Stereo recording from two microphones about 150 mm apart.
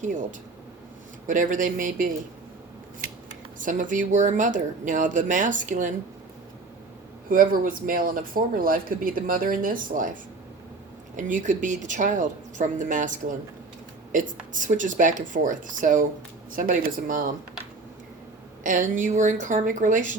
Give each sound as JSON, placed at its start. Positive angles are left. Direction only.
{"t": 0.0, "sound": "speech", "side_deg": -55}
{"t": 3.6, "sound": "speech", "side_deg": -60}
{"t": 7.3, "sound": "speech", "side_deg": -65}
{"t": 11.2, "sound": "speech", "side_deg": -60}
{"t": 18.6, "sound": "speech", "side_deg": -60}